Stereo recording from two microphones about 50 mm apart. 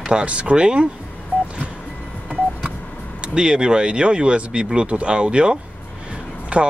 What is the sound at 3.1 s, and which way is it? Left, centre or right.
Speech, centre.